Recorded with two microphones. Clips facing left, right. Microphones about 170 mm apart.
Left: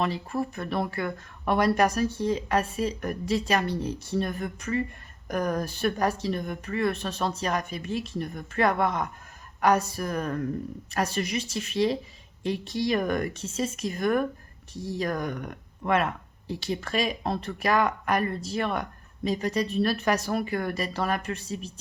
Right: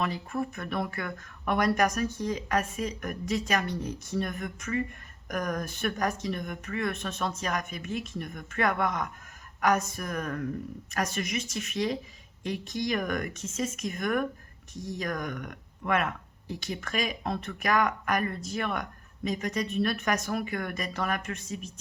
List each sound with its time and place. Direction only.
0.0 s speech: 30° left (ahead or behind)